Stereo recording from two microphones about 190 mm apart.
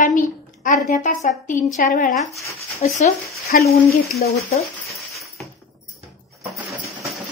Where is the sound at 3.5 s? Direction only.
50° left (ahead or behind).